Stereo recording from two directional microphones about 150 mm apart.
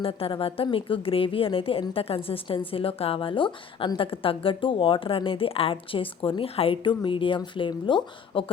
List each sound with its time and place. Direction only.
0.0 s a woman's voice: 40° left (ahead or behind)